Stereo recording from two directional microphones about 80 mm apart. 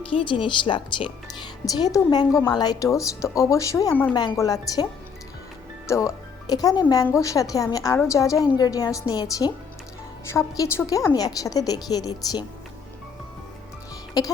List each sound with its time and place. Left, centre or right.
0.1 s speech: left
1.6 s a woman's voice: left
2.5 s speech: left
2.8 s a woman's voice: left
5.9 s a woman's voice: left
7.9 s a woman's voice: left
10.2 s a woman's voice: left
14.2 s a woman's voice: left